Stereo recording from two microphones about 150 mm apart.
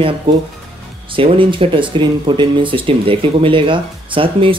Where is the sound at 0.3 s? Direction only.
35° right (ahead or behind).